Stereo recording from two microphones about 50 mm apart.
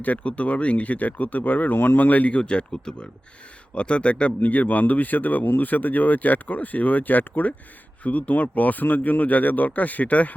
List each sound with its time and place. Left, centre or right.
0.0 s speech: left
2.4 s speech: centre